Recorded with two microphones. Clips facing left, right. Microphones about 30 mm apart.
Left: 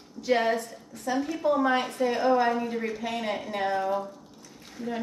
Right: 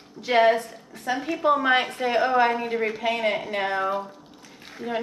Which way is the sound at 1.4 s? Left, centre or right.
Right.